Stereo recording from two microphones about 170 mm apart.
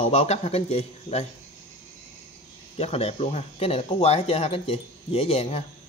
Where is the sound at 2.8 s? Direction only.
35° left (ahead or behind).